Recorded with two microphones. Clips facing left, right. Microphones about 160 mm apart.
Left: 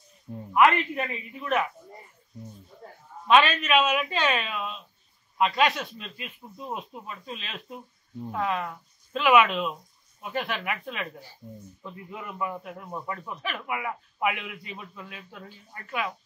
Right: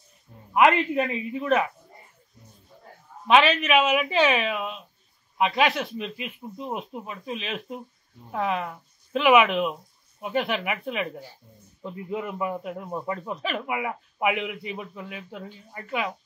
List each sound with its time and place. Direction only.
0.5 s a man's voice: 25° right (ahead or behind)
3.3 s a man's voice: 15° right (ahead or behind)